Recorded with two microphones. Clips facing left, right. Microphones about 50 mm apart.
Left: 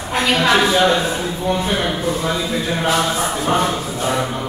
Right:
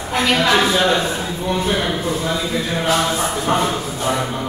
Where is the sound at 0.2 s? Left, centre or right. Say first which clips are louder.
Left 1 dB; centre.